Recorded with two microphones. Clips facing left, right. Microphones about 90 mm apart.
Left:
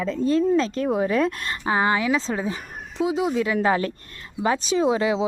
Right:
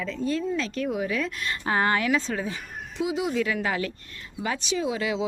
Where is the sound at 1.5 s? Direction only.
20° left (ahead or behind).